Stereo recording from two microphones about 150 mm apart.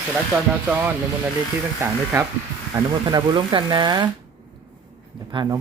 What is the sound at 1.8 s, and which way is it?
Speech, 15° right (ahead or behind).